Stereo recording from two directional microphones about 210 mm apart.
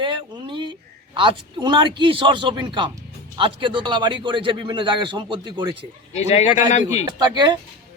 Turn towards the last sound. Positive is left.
turn(degrees=-20)  # may be behind; listen again after turning